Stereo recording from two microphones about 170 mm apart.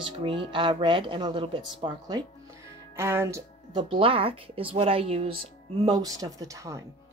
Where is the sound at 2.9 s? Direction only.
15° right (ahead or behind).